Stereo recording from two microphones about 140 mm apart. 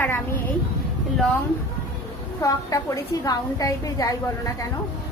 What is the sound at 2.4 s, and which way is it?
A woman's voice, 25° left (ahead or behind).